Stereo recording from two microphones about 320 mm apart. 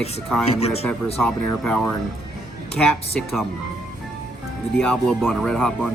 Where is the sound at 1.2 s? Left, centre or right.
Centre.